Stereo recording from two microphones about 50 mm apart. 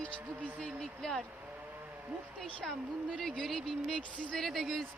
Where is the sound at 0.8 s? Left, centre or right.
Centre.